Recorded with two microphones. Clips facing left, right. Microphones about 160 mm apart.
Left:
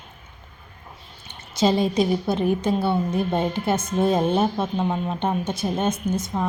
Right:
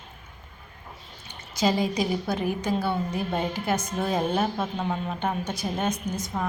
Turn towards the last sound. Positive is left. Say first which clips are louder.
# left 5 dB
turn(degrees=25)  # may be behind; listen again after turning